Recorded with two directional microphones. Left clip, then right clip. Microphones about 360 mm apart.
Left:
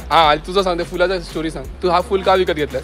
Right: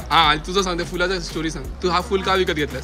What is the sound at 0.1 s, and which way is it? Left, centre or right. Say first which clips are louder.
Speech: left 3 dB; centre.